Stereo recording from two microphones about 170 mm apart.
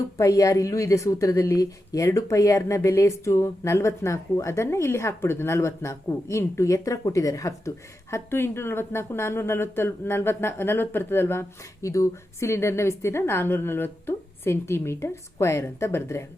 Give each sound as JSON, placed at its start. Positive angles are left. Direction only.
{"t": 0.2, "sound": "speech", "side_deg": 20}